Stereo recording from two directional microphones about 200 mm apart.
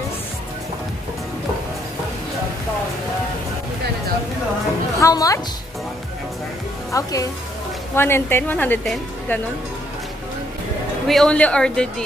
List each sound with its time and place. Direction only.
5.0 s a woman's voice: 15° left (ahead or behind)
6.9 s a woman's voice: 15° left (ahead or behind)
11.1 s speech: 5° left (ahead or behind)